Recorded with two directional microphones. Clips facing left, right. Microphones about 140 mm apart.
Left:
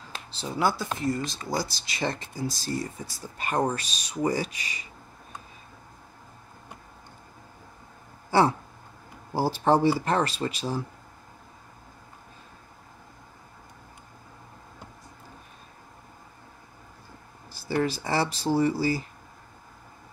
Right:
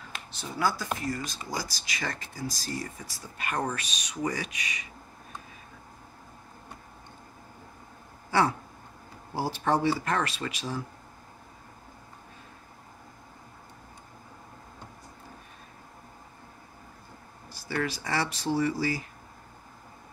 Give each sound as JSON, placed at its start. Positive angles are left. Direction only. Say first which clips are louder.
{"t": 0.1, "sound": "speech", "louder": "left 5 dB", "side_deg": 25}
{"t": 8.3, "sound": "a sound", "louder": "left 4 dB", "side_deg": 30}
{"t": 9.3, "sound": "speech", "louder": "left 5 dB", "side_deg": 35}
{"t": 17.6, "sound": "speech", "louder": "left 5 dB", "side_deg": 30}